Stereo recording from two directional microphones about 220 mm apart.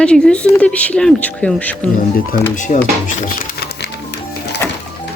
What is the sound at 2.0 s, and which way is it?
Speech, 40° left (ahead or behind).